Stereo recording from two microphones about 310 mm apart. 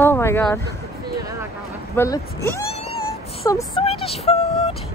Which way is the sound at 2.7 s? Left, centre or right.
Centre.